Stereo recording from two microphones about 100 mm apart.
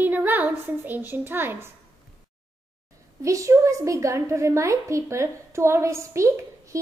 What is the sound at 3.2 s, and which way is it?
A woman's voice, 30° right (ahead or behind).